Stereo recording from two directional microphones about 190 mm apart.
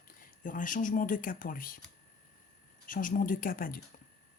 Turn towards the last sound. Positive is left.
turn(degrees=45)  # may be behind; listen again after turning